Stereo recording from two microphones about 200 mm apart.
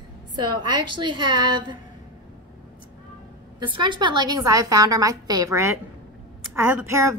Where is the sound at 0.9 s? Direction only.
25° right (ahead or behind).